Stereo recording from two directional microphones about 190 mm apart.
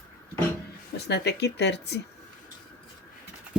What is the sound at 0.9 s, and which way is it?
Speech, 60° left (ahead or behind).